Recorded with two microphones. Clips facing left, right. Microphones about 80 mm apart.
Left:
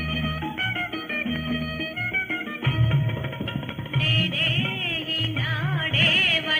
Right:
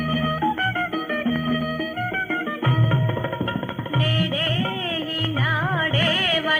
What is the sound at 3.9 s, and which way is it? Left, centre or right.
Music, right.